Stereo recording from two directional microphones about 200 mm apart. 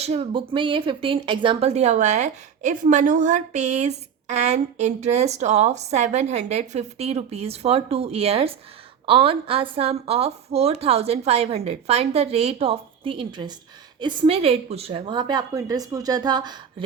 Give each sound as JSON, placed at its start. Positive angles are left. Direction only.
{"t": 0.0, "sound": "a woman's voice", "side_deg": -30}